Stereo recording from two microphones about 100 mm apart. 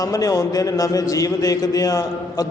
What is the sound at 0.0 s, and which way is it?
A man's voice, 35° left (ahead or behind).